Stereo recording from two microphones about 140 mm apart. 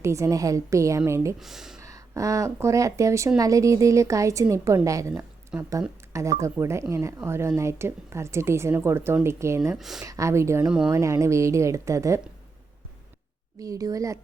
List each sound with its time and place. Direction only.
0.0 s speech: 20° right (ahead or behind)
1.4 s speech: 5° right (ahead or behind)
1.8 s speech: 25° right (ahead or behind)
9.7 s speech: centre (ahead or behind)
10.1 s speech: 20° right (ahead or behind)
10.7 s speech: 5° right (ahead or behind)
10.9 s speech: 20° right (ahead or behind)
13.6 s speech: 25° right (ahead or behind)